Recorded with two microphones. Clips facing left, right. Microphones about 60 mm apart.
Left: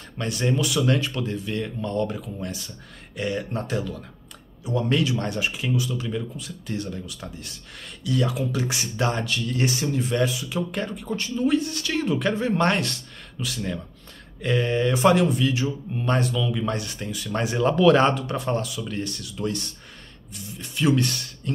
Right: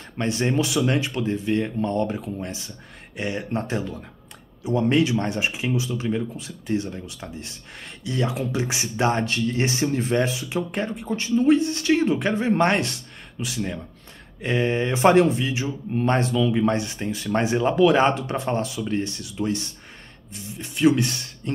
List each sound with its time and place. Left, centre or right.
0.2 s speech: right; by 13.8 s centre
14.4 s speech: right
17.6 s speech: centre
18.1 s speech: right